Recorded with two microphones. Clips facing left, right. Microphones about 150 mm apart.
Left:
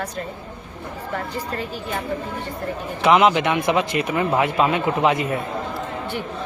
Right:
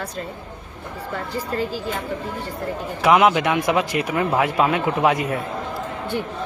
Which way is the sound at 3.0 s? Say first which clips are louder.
Even; 5° right (ahead or behind).